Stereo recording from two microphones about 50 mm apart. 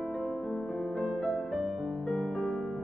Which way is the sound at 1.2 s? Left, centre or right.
Centre.